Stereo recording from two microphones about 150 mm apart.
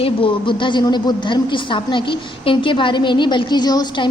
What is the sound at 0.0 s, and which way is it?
A woman's voice, 35° left (ahead or behind).